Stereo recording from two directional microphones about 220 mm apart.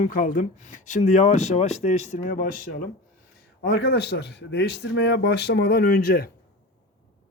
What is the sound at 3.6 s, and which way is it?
Speech, 50° left (ahead or behind).